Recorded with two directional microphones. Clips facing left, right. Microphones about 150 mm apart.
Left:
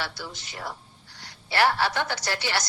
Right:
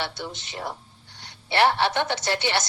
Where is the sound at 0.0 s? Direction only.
25° right (ahead or behind).